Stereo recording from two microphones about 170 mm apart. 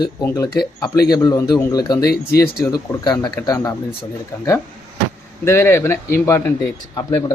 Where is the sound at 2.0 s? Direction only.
65° left (ahead or behind).